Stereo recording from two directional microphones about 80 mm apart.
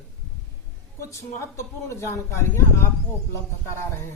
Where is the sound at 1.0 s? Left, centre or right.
Left.